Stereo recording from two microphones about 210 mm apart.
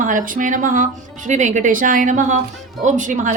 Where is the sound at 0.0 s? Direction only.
35° right (ahead or behind).